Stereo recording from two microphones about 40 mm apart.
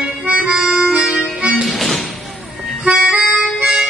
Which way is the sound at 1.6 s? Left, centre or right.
Centre.